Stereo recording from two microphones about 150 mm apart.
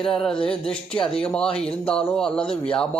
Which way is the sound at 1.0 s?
40° left (ahead or behind).